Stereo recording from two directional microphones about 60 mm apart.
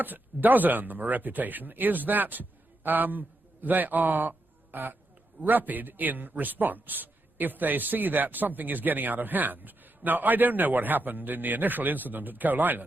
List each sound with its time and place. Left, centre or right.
0.0 s a man's voice: right